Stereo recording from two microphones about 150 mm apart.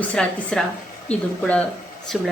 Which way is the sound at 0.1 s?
5° left (ahead or behind).